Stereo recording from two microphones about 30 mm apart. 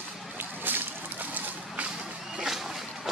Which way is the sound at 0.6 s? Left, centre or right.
Right.